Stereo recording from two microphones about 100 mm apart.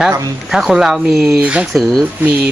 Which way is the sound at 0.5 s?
5° right (ahead or behind).